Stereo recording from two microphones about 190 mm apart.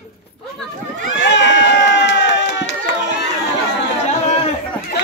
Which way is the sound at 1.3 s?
70° left (ahead or behind).